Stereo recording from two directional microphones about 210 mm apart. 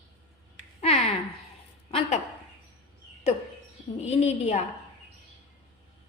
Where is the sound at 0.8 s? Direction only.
30° left (ahead or behind).